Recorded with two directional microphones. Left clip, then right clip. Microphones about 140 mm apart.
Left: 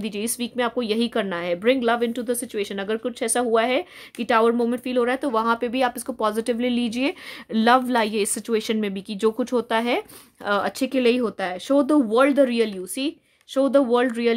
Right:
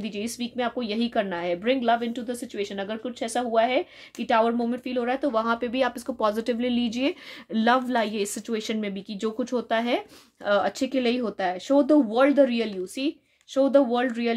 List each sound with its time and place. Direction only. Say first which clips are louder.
0.0 s a woman's voice: left 4 dB; 65° left (ahead or behind)